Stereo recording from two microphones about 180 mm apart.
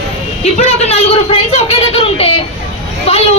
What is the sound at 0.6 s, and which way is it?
A woman's voice, 35° left (ahead or behind).